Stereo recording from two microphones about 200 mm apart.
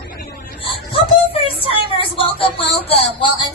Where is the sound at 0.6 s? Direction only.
30° left (ahead or behind).